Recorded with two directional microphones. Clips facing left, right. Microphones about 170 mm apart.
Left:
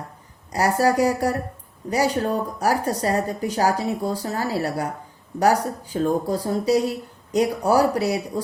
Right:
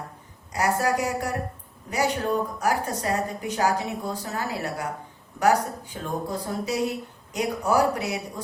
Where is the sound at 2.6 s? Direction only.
35° left (ahead or behind).